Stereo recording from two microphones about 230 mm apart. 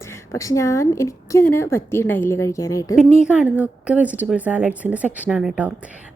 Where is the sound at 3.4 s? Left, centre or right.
Centre.